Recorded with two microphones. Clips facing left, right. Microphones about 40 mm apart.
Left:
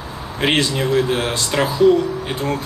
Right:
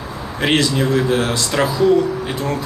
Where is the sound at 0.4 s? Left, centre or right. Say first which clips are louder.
Right 1 dB; left.